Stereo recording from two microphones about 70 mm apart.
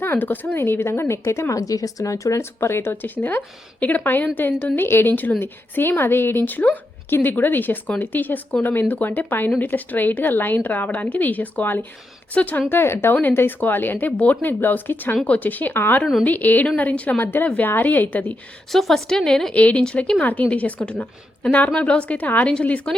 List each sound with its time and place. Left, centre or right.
0.0 s speech: left
2.4 s a woman's voice: left
18.7 s a woman's voice: centre